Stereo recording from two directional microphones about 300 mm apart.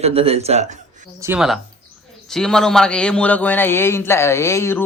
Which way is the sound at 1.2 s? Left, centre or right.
Centre.